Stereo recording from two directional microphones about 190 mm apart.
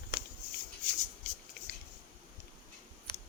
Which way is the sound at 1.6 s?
60° left (ahead or behind).